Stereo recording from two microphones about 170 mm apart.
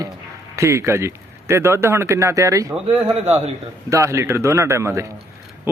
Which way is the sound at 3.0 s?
35° right (ahead or behind).